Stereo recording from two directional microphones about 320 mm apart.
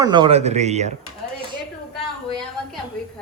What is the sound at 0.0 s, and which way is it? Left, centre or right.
Speech, centre.